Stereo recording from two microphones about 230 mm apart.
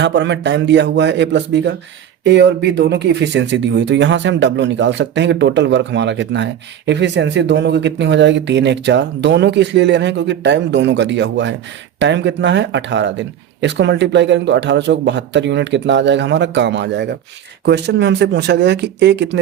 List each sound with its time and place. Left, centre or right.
0.0 s speech: right